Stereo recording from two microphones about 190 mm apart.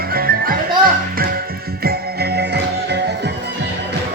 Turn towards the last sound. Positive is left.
turn(degrees=-60)  # may be behind; listen again after turning